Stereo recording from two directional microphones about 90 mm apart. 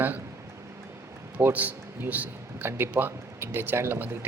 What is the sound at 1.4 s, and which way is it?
A man's voice, 20° right (ahead or behind).